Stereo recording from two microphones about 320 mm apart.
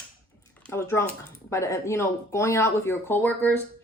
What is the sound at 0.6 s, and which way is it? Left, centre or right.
Speech, centre.